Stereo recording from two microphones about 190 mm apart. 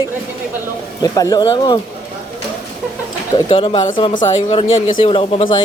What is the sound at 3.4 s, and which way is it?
Speech, 30° left (ahead or behind).